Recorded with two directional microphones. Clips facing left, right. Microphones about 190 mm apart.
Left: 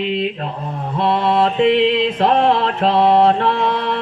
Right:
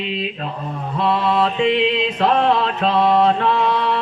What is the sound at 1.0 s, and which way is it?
Mantra, 60° left (ahead or behind).